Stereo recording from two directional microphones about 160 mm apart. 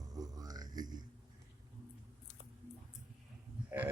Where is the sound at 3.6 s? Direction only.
10° right (ahead or behind).